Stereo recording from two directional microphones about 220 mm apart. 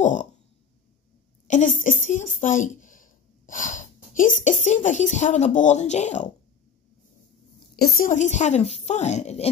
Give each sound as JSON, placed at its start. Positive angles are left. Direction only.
{"t": 0.0, "sound": "a sound", "side_deg": 35}
{"t": 1.5, "sound": "speech", "side_deg": 35}
{"t": 7.7, "sound": "a woman's voice", "side_deg": 45}